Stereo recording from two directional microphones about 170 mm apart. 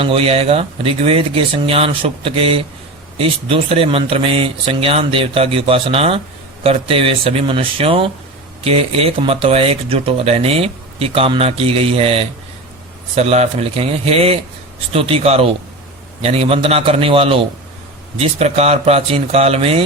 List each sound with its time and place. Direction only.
0.0 s speech: 35° right (ahead or behind)